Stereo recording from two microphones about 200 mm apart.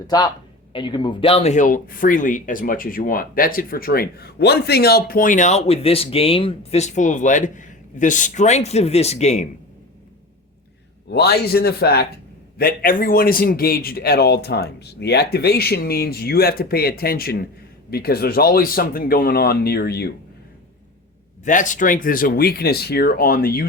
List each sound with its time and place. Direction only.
0.7 s speech: 25° left (ahead or behind)
11.1 s a man's voice: 55° left (ahead or behind)
21.4 s a man's voice: 40° left (ahead or behind)